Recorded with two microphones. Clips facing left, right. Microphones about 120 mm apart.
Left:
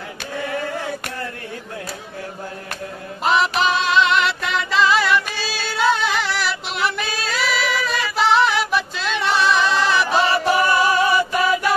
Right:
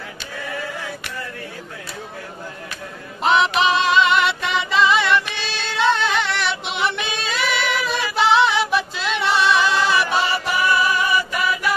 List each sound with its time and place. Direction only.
3.3 s music: centre (ahead or behind)
10.4 s music: 40° left (ahead or behind)